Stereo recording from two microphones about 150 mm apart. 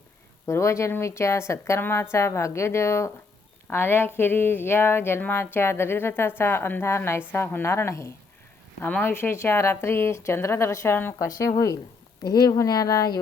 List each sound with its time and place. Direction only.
0.4 s a woman's voice: 20° left (ahead or behind)